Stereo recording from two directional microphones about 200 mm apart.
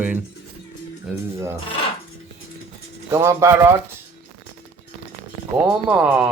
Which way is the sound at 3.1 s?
15° right (ahead or behind).